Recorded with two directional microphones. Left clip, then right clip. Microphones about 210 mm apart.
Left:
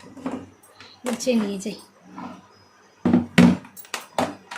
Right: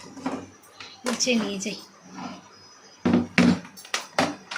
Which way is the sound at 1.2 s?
25° left (ahead or behind).